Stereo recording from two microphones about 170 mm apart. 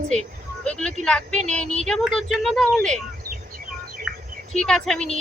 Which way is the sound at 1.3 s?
45° right (ahead or behind).